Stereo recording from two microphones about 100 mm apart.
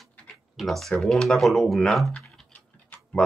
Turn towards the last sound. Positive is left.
turn(degrees=15)  # may be behind; listen again after turning